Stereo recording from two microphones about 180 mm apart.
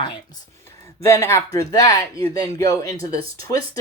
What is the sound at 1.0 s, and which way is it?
Speech, 15° left (ahead or behind).